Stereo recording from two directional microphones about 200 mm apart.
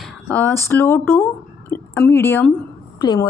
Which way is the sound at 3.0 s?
20° left (ahead or behind).